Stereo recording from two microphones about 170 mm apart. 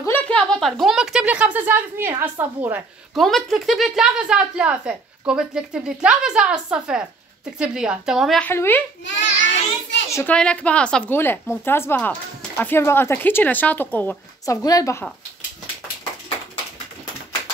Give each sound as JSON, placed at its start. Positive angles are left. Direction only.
{"t": 0.0, "sound": "speech", "side_deg": 10}
{"t": 3.2, "sound": "a woman's voice", "side_deg": 0}
{"t": 8.5, "sound": "a woman's voice", "side_deg": 10}
{"t": 9.0, "sound": "a child's voice", "side_deg": 90}
{"t": 10.0, "sound": "a woman's voice", "side_deg": 15}
{"t": 10.3, "sound": "a woman's voice", "side_deg": 5}